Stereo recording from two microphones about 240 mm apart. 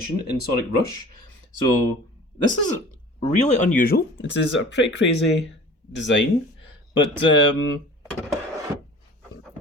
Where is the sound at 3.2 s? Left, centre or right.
Left.